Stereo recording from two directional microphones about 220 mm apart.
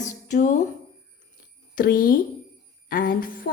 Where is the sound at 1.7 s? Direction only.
40° left (ahead or behind).